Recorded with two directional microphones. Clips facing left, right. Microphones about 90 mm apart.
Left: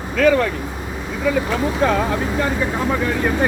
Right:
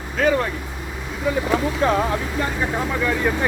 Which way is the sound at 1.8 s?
65° left (ahead or behind).